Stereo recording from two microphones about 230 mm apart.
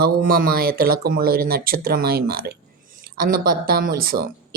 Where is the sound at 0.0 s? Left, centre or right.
Right.